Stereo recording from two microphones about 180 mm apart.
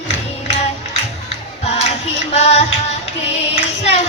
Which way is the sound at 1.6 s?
35° left (ahead or behind).